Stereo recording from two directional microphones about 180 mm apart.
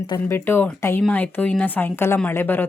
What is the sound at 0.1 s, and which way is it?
Speech, 15° left (ahead or behind).